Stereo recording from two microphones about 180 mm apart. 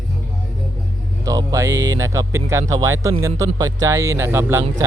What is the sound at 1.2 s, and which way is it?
Speech, 20° right (ahead or behind).